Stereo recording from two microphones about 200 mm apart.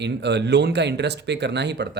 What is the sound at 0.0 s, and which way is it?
Speech, 60° right (ahead or behind).